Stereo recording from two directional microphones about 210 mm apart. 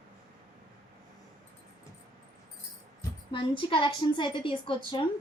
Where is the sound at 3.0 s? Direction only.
25° left (ahead or behind).